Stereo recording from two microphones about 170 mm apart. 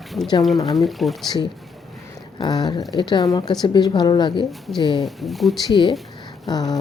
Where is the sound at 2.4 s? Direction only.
25° left (ahead or behind).